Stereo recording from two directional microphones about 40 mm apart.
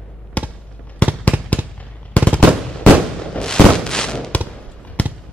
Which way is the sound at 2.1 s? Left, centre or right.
Left.